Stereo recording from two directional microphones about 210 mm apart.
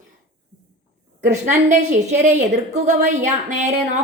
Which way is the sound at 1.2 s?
35° right (ahead or behind).